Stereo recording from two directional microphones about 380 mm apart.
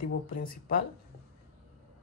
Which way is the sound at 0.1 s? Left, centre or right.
Left.